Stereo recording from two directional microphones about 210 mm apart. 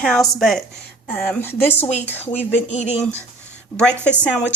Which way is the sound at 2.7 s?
30° left (ahead or behind).